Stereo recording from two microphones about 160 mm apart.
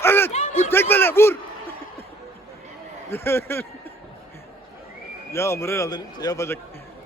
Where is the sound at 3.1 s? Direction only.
15° left (ahead or behind).